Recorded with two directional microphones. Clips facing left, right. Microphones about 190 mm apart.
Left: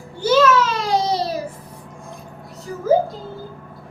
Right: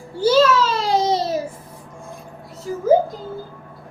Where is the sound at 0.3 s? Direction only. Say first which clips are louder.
Even; 30° right (ahead or behind).